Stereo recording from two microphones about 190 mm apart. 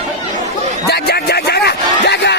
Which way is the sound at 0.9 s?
55° left (ahead or behind).